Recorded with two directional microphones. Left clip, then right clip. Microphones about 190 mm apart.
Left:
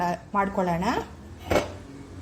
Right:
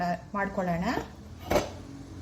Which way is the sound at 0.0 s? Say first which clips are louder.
Left 5 dB; 25° left (ahead or behind).